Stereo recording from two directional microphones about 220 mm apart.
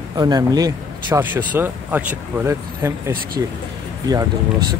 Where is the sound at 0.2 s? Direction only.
15° right (ahead or behind).